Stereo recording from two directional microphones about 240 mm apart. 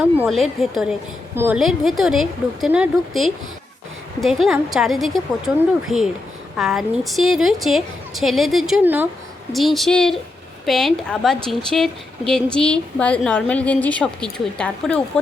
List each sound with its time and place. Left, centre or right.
0.2 s speech: centre